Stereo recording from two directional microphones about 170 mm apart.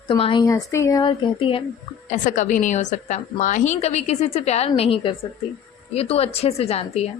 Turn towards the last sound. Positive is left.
turn(degrees=35)  # may be behind; listen again after turning